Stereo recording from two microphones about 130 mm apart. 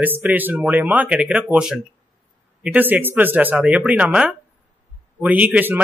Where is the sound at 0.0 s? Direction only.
15° right (ahead or behind).